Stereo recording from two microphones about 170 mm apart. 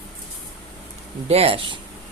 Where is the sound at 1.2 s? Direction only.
35° right (ahead or behind).